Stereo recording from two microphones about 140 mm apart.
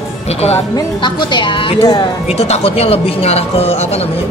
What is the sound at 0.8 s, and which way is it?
A woman's voice, 35° left (ahead or behind).